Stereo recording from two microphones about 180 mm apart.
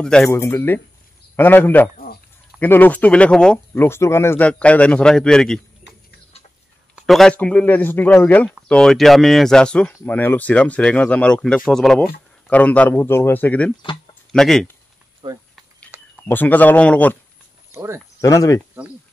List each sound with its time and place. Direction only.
0.0 s speech: 5° left (ahead or behind)
7.1 s speech: 5° left (ahead or behind)
15.2 s speech: 30° right (ahead or behind)
15.9 s a sound: 10° right (ahead or behind)
16.3 s speech: 10° left (ahead or behind)
17.7 s speech: 15° right (ahead or behind)
18.2 s speech: 15° left (ahead or behind)